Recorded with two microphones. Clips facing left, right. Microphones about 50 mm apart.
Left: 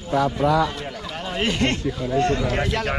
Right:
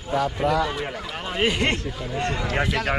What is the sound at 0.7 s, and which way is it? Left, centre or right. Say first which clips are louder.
Speech: right 2 dB; centre.